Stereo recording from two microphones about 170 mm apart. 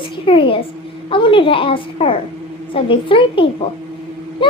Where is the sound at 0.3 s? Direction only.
30° left (ahead or behind).